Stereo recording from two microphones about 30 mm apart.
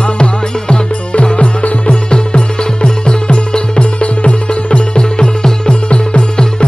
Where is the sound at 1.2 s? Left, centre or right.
Left.